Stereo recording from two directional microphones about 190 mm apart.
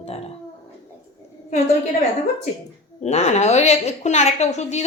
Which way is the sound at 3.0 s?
35° left (ahead or behind).